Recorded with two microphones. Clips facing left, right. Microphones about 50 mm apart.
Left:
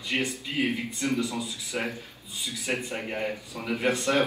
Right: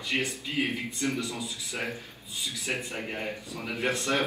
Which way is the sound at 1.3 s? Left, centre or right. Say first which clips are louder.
Left 3 dB; right.